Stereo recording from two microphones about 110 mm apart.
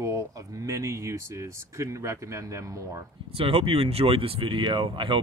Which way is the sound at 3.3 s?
55° right (ahead or behind).